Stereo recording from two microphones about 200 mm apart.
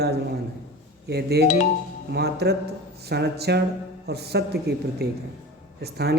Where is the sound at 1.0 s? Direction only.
55° right (ahead or behind).